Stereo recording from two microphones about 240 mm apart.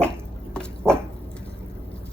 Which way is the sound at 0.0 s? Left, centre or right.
Centre.